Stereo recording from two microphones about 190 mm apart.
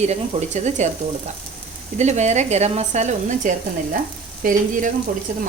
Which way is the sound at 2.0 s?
35° right (ahead or behind).